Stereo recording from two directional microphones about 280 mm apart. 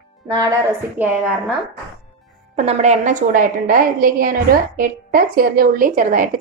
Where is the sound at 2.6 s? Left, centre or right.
Right.